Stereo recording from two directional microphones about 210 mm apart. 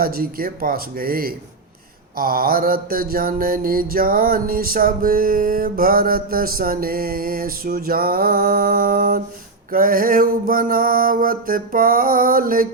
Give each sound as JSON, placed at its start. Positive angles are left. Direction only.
{"t": 0.0, "sound": "mantra", "side_deg": -45}